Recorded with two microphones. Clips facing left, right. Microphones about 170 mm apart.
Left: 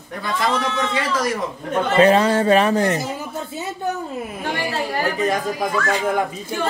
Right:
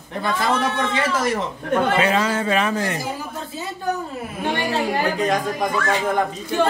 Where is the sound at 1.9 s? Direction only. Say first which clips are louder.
Left 5 dB; 35° left (ahead or behind).